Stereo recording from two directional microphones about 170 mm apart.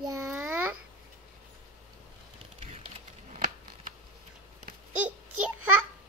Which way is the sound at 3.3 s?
50° right (ahead or behind).